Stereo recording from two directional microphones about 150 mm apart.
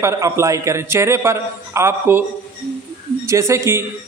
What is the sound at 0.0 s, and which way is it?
A man's voice, 20° right (ahead or behind).